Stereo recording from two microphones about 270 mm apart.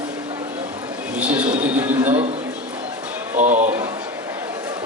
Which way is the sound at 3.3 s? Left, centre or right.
Right.